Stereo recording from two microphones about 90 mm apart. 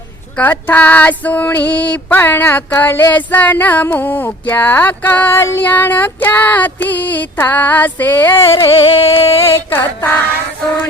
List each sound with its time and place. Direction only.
0.3 s female singing: 20° left (ahead or behind)
5.4 s music: 30° left (ahead or behind)
5.6 s female singing: 20° left (ahead or behind)
8.7 s music: 90° left
9.7 s female singing: 20° left (ahead or behind)